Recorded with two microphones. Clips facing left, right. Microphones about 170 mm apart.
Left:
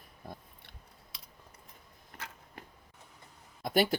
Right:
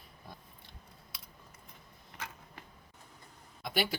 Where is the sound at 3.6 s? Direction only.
45° left (ahead or behind).